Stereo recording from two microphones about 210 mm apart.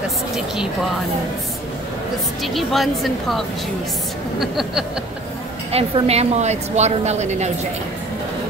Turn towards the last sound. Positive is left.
turn(degrees=-35)  # may be behind; listen again after turning